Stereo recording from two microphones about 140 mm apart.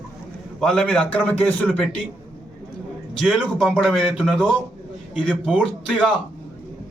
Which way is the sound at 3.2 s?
Centre (ahead or behind).